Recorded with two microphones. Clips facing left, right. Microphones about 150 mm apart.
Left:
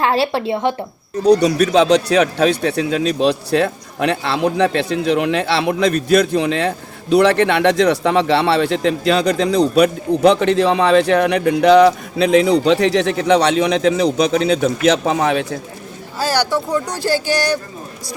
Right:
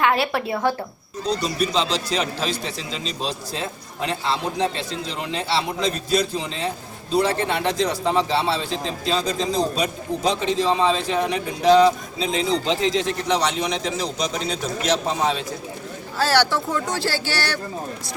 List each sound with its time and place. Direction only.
0.0 s a woman's voice: 30° left (ahead or behind)
1.2 s speech: 75° left (ahead or behind)
16.1 s speech: 10° left (ahead or behind)